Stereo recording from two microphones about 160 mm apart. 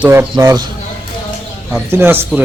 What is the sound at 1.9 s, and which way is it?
Speech, 15° right (ahead or behind).